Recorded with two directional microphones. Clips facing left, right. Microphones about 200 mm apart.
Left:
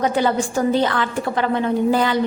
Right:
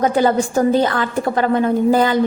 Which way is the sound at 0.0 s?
40° right (ahead or behind).